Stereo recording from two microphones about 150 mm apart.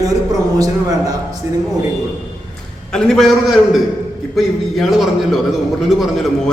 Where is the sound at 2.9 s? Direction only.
Centre (ahead or behind).